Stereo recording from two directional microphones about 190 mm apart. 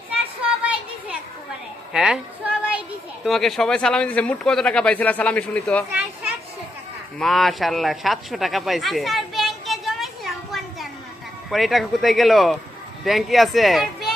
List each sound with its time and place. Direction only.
1.9 s child singing: 5° right (ahead or behind)
3.2 s speech: centre (ahead or behind)
7.2 s a sound: centre (ahead or behind)
11.5 s speech: centre (ahead or behind)